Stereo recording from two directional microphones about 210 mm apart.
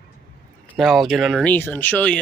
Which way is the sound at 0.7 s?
Centre (ahead or behind).